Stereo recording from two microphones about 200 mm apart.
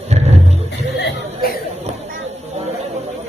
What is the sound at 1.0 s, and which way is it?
Speech, 60° left (ahead or behind).